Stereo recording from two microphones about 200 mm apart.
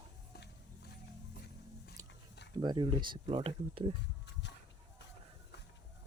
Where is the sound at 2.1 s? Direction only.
60° left (ahead or behind).